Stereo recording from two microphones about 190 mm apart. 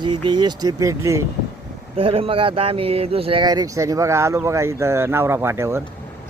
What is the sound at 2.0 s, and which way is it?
Speech, 30° right (ahead or behind).